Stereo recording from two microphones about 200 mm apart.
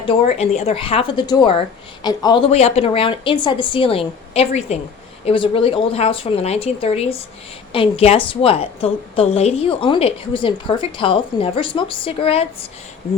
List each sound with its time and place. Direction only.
0.0 s a woman's voice: 30° left (ahead or behind)